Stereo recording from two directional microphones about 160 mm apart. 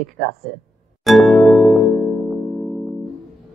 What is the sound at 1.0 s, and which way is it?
Music, centre (ahead or behind).